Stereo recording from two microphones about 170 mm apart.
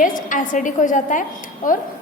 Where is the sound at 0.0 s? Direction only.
50° left (ahead or behind).